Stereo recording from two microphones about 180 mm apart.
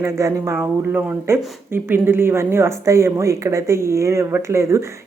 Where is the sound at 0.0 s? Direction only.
15° right (ahead or behind).